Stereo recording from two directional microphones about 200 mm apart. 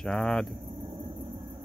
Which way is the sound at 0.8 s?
20° right (ahead or behind).